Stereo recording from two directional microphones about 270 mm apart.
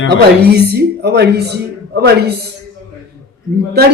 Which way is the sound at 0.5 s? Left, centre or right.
Right.